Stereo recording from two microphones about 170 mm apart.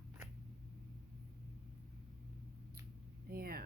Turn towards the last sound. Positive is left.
turn(degrees=-60)  # may be behind; listen again after turning